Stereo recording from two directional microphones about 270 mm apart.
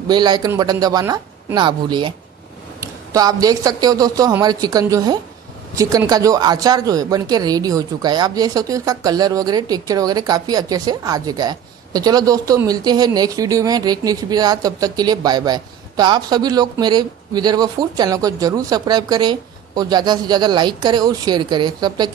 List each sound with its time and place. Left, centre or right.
0.1 s speech: centre